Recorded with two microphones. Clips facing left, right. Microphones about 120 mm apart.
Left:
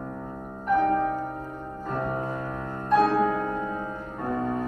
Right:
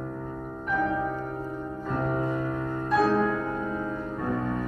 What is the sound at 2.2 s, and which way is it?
Music, 20° left (ahead or behind).